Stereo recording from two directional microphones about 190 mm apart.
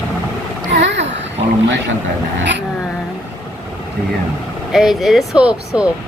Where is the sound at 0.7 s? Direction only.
65° right (ahead or behind).